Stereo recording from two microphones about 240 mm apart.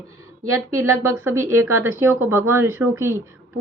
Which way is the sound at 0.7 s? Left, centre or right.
Centre.